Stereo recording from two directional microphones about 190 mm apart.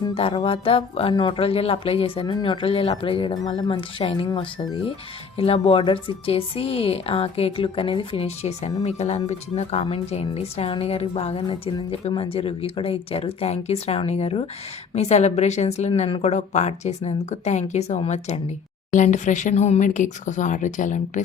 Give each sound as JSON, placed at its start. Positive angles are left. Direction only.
{"t": 0.1, "sound": "music", "side_deg": 30}
{"t": 0.3, "sound": "speech", "side_deg": 30}
{"t": 5.4, "sound": "a woman's voice", "side_deg": 30}